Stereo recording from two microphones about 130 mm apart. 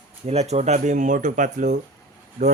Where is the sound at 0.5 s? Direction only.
60° right (ahead or behind).